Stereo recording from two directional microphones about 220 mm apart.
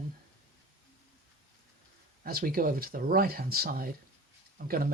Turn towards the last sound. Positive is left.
turn(degrees=-40)  # may be behind; listen again after turning